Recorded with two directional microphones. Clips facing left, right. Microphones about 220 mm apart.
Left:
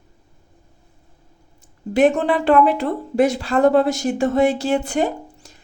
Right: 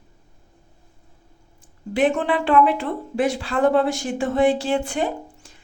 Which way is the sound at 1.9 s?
45° left (ahead or behind).